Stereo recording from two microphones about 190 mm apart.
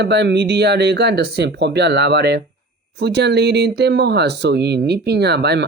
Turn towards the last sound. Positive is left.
turn(degrees=-60)  # may be behind; listen again after turning